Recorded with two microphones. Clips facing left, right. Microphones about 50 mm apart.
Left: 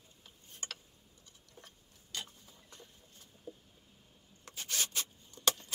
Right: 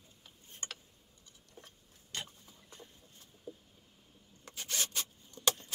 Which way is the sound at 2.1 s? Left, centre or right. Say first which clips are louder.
Right 1 dB; right.